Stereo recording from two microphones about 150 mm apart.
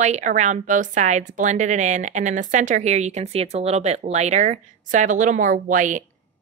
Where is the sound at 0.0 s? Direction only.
55° right (ahead or behind).